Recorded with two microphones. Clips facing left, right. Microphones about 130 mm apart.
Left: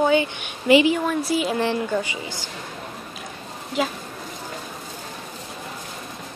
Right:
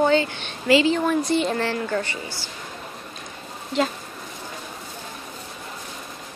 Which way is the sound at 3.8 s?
5° left (ahead or behind).